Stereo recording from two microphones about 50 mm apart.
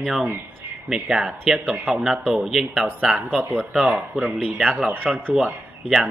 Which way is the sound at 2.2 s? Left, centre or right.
Centre.